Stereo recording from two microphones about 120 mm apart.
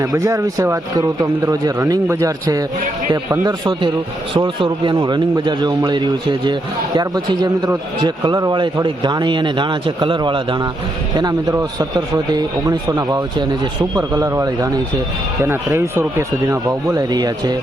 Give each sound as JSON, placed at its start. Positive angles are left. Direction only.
{"t": 0.0, "sound": "a man's voice", "side_deg": -25}
{"t": 11.2, "sound": "a man's voice", "side_deg": -30}